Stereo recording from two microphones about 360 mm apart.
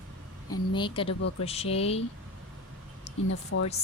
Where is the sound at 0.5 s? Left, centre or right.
Centre.